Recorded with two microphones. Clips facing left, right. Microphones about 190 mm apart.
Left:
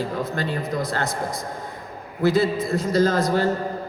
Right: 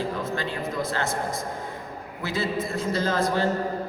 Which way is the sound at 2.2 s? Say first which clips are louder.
Left 10 dB; 40° left (ahead or behind).